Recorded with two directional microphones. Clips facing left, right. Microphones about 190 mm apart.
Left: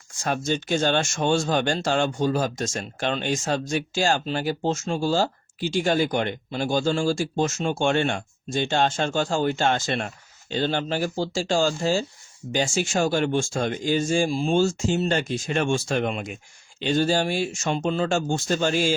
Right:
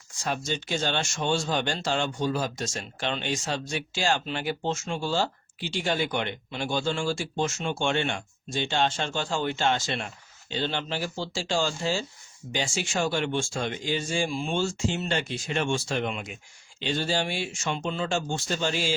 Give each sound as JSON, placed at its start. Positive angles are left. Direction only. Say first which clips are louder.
{"t": 0.3, "sound": "speech", "louder": "left 5 dB", "side_deg": 50}